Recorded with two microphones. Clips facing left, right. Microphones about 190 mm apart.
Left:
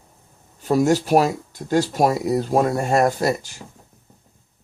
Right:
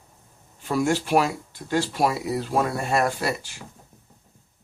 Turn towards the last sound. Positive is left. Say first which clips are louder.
# left 6 dB
turn(degrees=40)  # may be behind; listen again after turning